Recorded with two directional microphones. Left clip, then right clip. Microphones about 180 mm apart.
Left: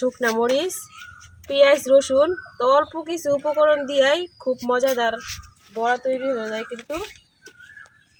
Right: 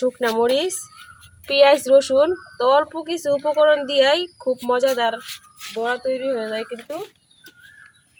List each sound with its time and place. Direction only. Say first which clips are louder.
0.0 s speech: right 2 dB; 5° right (ahead or behind)
3.2 s speech: right 1 dB; 20° right (ahead or behind)
3.4 s speech: right 2 dB; 10° right (ahead or behind)